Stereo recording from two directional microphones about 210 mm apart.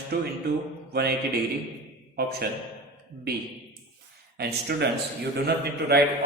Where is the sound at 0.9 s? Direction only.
50° right (ahead or behind).